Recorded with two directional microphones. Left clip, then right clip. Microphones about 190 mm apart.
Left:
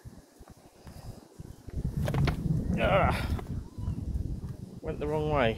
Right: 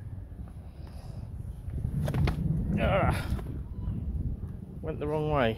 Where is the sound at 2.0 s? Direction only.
15° right (ahead or behind).